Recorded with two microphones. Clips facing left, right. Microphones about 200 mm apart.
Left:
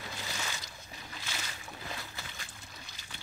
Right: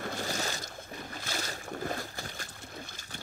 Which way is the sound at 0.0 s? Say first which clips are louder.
Right 7 dB; 50° right (ahead or behind).